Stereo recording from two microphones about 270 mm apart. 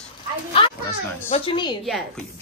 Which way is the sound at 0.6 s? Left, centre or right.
Centre.